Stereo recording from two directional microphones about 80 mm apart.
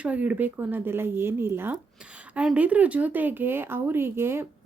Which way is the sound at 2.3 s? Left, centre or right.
Centre.